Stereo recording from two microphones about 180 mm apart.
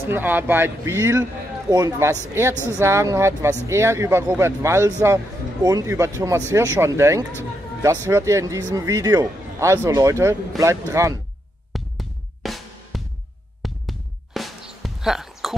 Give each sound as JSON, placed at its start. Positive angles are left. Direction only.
{"t": 0.0, "sound": "a man's voice", "side_deg": -10}
{"t": 11.7, "sound": "music", "side_deg": 0}